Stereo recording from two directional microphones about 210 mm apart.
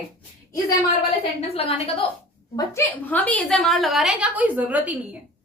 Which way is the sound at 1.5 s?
30° left (ahead or behind).